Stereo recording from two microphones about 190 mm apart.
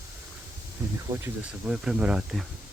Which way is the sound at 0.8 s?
15° right (ahead or behind).